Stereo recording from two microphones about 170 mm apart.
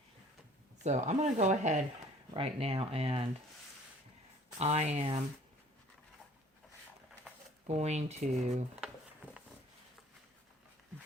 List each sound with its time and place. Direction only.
0.9 s speech: 45° right (ahead or behind)
4.5 s speech: 40° right (ahead or behind)
7.7 s speech: 40° right (ahead or behind)
8.8 s a sound: 5° right (ahead or behind)